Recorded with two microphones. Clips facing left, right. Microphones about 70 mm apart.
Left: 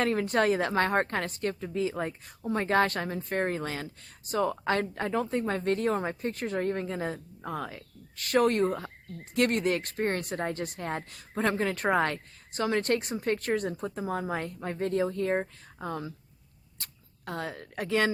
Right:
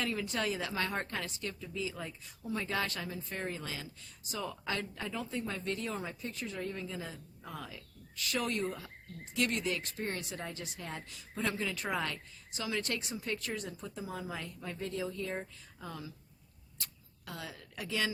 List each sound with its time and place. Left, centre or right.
0.0 s a woman's voice: left